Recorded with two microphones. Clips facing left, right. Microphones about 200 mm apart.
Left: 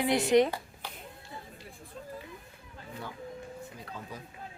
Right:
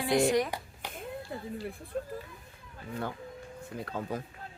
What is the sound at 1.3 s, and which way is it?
Speech, 70° right (ahead or behind).